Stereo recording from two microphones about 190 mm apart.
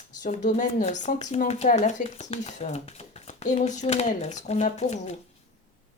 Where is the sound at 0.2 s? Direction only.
40° left (ahead or behind).